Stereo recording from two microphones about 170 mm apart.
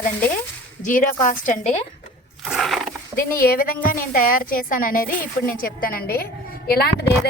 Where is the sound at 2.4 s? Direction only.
Centre (ahead or behind).